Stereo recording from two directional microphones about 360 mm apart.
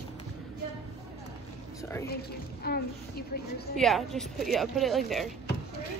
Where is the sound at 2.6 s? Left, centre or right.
Left.